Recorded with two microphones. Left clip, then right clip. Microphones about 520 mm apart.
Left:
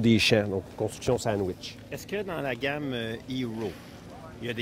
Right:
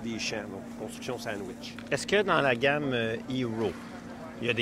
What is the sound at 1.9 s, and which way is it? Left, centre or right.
Speech, right.